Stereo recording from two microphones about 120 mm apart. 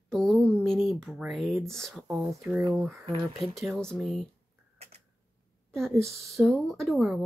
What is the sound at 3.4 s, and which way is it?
Speech, centre (ahead or behind).